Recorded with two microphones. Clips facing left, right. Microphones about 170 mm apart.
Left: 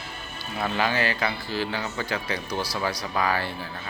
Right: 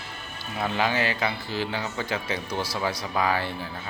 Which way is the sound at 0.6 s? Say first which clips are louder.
Even; 15° right (ahead or behind).